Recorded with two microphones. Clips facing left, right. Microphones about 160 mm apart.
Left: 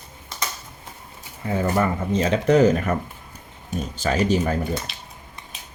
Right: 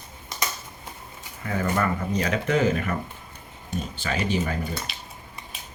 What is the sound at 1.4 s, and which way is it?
Speech, 25° left (ahead or behind).